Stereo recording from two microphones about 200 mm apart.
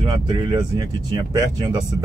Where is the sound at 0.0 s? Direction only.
20° right (ahead or behind).